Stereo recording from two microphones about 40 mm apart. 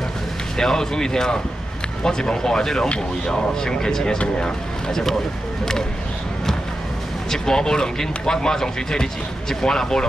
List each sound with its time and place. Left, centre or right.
0.6 s speech: centre
7.2 s speech: centre